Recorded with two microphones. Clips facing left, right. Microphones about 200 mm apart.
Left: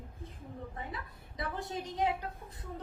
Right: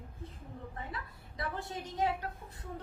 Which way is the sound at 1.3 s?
20° left (ahead or behind).